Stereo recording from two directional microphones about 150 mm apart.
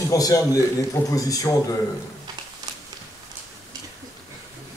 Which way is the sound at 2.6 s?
25° right (ahead or behind).